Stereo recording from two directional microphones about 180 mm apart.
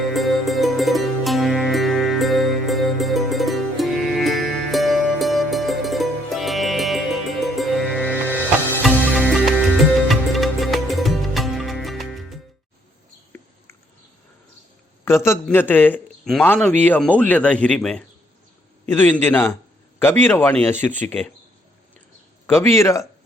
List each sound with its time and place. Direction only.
0.1 s music: centre (ahead or behind)
15.0 s a man's voice: 15° left (ahead or behind)
22.7 s speech: 15° left (ahead or behind)